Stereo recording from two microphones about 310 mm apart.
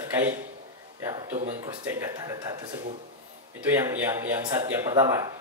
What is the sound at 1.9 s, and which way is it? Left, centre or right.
Speech, centre.